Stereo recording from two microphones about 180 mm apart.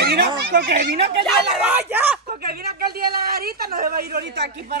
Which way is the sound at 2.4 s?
60° right (ahead or behind).